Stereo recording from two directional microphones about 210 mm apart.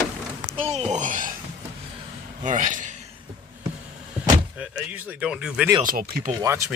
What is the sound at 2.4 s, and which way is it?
Speech, 35° right (ahead or behind).